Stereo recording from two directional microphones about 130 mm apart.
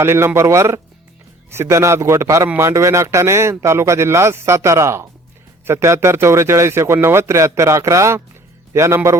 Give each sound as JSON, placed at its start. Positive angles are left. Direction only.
{"t": 0.0, "sound": "a man's voice", "side_deg": -20}